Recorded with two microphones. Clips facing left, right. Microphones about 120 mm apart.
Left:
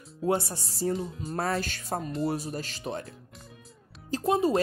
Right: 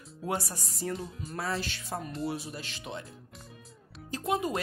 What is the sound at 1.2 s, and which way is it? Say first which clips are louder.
Music: left 4 dB; 45° left (ahead or behind).